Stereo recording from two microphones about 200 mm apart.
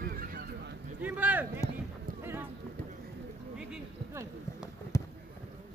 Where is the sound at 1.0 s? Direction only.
10° right (ahead or behind).